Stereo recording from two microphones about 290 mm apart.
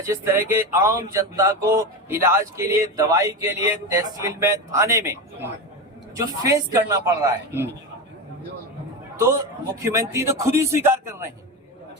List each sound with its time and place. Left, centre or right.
0.0 s speech: centre
9.1 s a man's voice: centre